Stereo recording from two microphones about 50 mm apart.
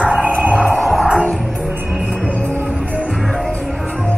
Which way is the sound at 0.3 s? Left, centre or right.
Right.